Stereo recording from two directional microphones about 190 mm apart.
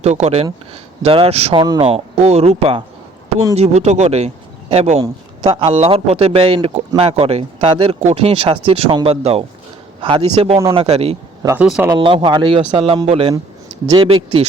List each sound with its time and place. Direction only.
0.0 s a man's voice: 35° right (ahead or behind)
11.4 s speech: 5° right (ahead or behind)
11.9 s a man's voice: 25° right (ahead or behind)